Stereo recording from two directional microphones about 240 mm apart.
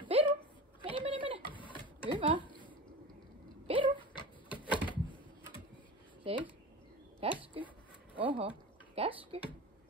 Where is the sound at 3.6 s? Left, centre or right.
Right.